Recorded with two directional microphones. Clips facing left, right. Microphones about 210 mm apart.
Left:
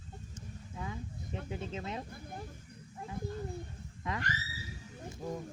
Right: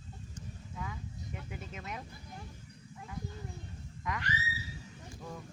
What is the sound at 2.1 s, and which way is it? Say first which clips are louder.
Speech: left 4 dB; 50° left (ahead or behind).